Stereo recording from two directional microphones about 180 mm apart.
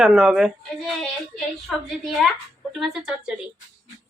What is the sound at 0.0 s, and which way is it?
Speech, 5° right (ahead or behind).